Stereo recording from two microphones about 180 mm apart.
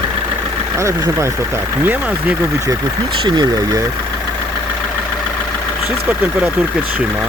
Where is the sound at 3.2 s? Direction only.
25° right (ahead or behind).